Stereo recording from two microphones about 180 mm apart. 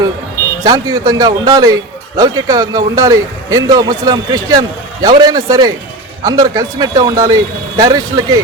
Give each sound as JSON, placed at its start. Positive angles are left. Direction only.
{"t": 0.6, "sound": "a man's voice", "side_deg": -20}